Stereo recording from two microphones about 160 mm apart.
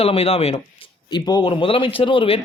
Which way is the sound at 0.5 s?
25° left (ahead or behind).